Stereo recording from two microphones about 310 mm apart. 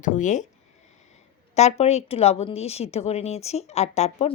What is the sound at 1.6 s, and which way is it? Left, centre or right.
A woman's voice, left.